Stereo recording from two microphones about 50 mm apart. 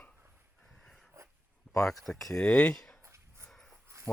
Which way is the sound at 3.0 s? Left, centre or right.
Right.